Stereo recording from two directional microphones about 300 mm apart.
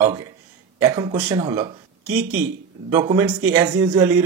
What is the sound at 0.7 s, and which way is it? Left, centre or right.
Speech, centre.